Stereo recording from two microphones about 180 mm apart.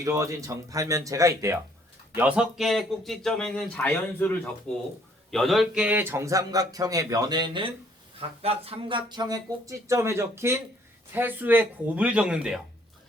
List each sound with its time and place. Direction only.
0.0 s a man's voice: 15° right (ahead or behind)